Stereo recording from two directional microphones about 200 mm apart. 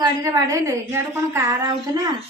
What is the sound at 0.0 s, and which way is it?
A woman's voice, 15° right (ahead or behind).